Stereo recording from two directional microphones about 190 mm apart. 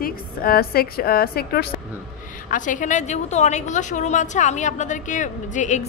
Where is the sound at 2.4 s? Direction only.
45° left (ahead or behind).